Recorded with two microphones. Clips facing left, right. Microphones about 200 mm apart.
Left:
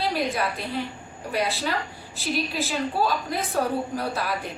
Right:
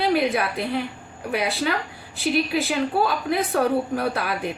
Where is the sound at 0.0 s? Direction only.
60° right (ahead or behind).